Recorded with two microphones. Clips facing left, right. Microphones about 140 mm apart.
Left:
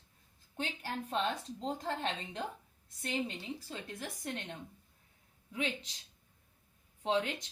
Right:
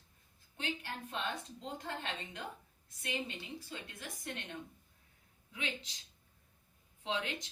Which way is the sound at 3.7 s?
40° left (ahead or behind).